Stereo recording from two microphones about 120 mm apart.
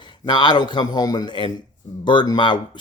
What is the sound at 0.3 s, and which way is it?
Speech, 40° left (ahead or behind).